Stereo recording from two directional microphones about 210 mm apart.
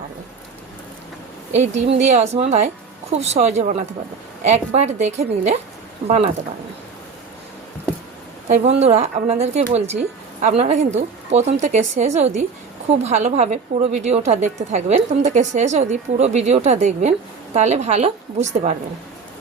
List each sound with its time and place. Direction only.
1.5 s a woman's voice: 30° right (ahead or behind)
8.4 s a woman's voice: 35° right (ahead or behind)